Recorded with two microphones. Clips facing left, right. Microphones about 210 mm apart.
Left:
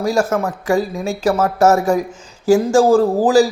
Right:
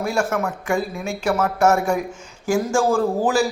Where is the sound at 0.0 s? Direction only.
35° left (ahead or behind).